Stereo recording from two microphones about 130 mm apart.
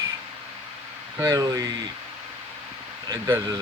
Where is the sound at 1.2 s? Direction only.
25° right (ahead or behind).